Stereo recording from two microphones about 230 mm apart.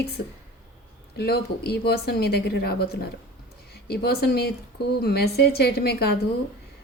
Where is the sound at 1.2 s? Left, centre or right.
Left.